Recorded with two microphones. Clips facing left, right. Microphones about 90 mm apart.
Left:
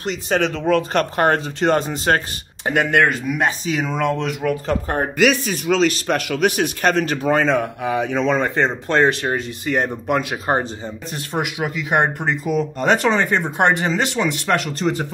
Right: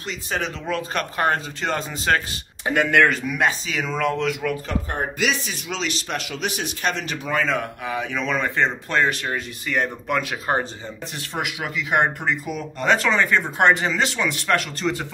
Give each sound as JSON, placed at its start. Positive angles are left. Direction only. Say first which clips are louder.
{"t": 0.0, "sound": "speech", "louder": "left 7 dB", "side_deg": 65}
{"t": 2.8, "sound": "speech", "louder": "even", "side_deg": 20}
{"t": 4.6, "sound": "speech", "louder": "left 5 dB", "side_deg": 50}